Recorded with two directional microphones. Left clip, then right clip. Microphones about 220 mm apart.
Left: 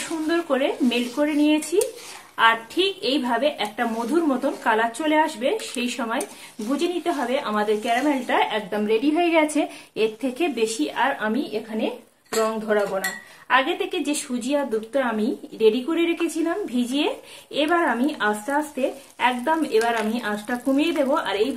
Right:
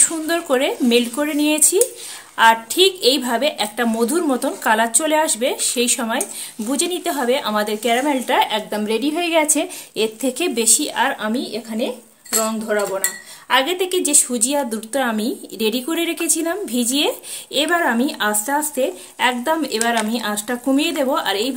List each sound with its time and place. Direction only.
0.3 s a woman's voice: 50° right (ahead or behind); by 10.3 s 30° right (ahead or behind)
10.4 s a woman's voice: 45° right (ahead or behind)